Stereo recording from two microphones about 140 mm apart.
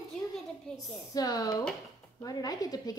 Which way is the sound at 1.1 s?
25° left (ahead or behind).